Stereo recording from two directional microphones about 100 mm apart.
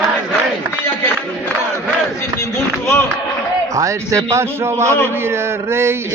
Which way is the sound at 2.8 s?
25° left (ahead or behind).